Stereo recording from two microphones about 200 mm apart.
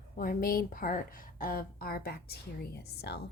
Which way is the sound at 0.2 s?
45° left (ahead or behind).